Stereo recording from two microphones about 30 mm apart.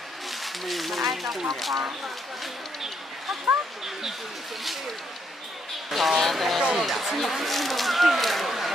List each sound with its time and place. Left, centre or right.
0.3 s speech: centre
5.9 s speech: centre